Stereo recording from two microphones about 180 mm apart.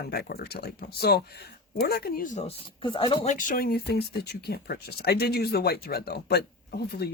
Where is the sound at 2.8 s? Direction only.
30° left (ahead or behind); by 7.1 s 60° left (ahead or behind).